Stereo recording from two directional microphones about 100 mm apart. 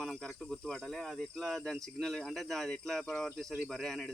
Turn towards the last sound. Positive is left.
turn(degrees=5)  # may be behind; listen again after turning